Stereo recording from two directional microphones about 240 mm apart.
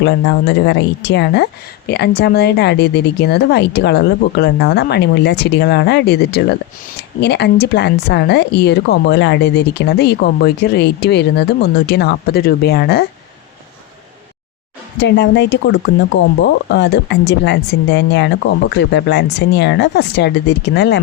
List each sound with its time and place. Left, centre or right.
0.0 s speech: left
14.9 s speech: left